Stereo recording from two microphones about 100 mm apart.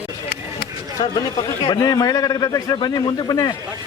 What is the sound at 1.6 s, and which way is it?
A man's voice, 40° left (ahead or behind).